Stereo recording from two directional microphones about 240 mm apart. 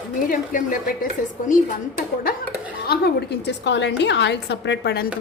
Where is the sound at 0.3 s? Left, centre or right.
Left.